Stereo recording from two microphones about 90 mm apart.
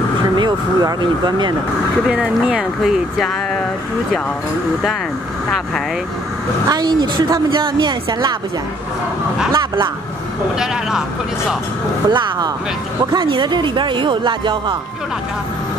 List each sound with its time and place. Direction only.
0.4 s speech: 50° right (ahead or behind)
2.0 s speech: 10° right (ahead or behind)
6.7 s speech: 55° right (ahead or behind)
9.5 s speech: 55° right (ahead or behind)
10.6 s speech: 5° right (ahead or behind)
12.1 s speech: 60° right (ahead or behind)